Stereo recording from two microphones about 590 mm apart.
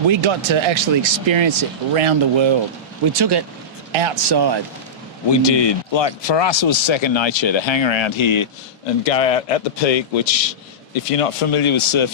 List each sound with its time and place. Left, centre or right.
0.1 s speech: right
3.1 s speech: right
5.3 s a man's voice: left
9.0 s a man's voice: left